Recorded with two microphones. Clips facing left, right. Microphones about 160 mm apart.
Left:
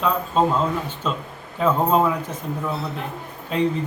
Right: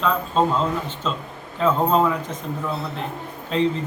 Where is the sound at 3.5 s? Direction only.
10° left (ahead or behind).